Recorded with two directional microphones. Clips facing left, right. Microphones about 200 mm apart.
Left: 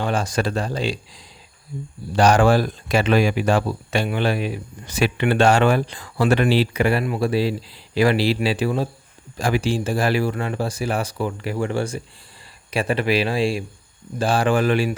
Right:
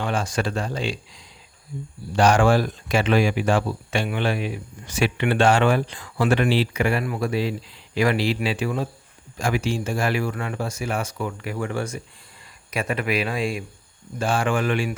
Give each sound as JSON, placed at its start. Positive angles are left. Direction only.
{"t": 0.0, "sound": "speech", "side_deg": 35}